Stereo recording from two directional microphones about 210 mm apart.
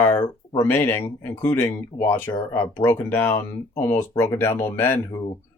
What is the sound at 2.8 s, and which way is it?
A man's voice, 10° left (ahead or behind).